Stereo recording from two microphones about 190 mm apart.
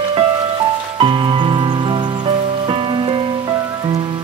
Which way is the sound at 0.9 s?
25° right (ahead or behind).